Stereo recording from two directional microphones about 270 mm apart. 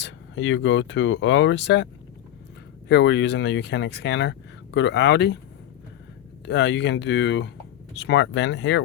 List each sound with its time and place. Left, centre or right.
0.0 s speech: left
2.9 s speech: left
6.4 s speech: left